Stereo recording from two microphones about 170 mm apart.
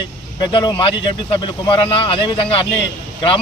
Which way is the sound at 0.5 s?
30° left (ahead or behind).